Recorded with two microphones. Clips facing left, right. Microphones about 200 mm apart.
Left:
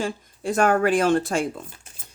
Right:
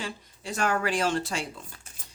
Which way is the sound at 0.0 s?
50° left (ahead or behind).